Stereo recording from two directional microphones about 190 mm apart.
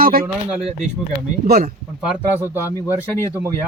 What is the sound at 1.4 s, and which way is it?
Speech, 50° right (ahead or behind).